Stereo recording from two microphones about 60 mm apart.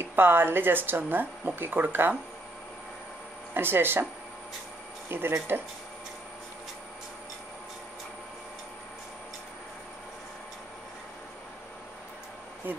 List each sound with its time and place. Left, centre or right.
0.0 s speech: right
3.5 s speech: right
5.1 s speech: right
12.6 s speech: right